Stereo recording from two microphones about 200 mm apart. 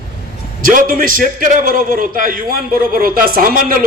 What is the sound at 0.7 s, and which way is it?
A man's voice, 45° right (ahead or behind).